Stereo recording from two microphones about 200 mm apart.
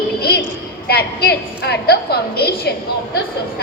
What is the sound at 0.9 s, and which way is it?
A woman's voice, 55° left (ahead or behind).